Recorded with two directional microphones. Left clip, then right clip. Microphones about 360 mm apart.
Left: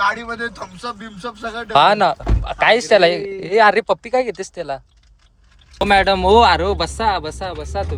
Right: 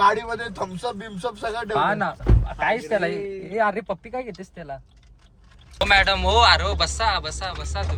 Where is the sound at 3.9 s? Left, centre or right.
Left.